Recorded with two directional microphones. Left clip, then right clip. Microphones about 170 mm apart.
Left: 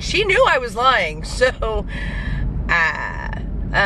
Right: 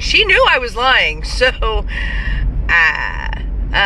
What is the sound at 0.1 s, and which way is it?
Speech, 15° left (ahead or behind).